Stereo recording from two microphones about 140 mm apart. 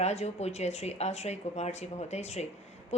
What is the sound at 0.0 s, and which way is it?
A woman's voice, 50° left (ahead or behind).